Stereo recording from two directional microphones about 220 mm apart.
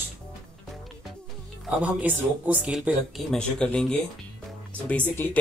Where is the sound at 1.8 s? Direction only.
5° right (ahead or behind).